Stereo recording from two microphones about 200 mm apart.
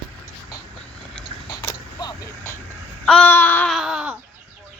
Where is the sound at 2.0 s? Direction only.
20° left (ahead or behind).